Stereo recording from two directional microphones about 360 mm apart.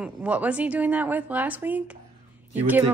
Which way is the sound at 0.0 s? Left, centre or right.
Centre.